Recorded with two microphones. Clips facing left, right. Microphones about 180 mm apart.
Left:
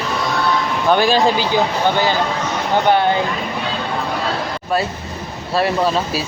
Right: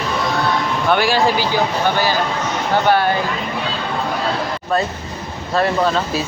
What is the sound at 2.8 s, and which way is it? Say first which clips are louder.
Speech: left 1 dB; 20° left (ahead or behind).